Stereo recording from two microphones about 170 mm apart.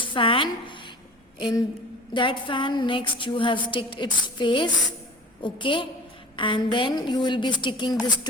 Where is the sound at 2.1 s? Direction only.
30° left (ahead or behind).